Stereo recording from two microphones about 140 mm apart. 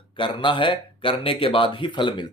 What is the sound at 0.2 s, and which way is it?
Speech, 35° left (ahead or behind).